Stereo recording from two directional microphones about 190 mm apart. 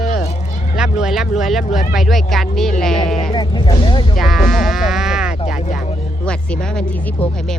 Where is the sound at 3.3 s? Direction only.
25° left (ahead or behind).